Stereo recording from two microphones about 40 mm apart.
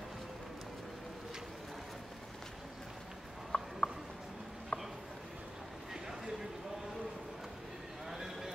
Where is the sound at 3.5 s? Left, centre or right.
Left.